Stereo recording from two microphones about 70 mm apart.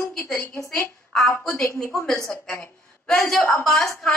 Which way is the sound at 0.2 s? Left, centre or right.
Left.